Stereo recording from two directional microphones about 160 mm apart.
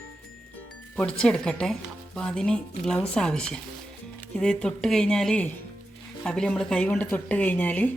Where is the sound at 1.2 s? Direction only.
5° left (ahead or behind).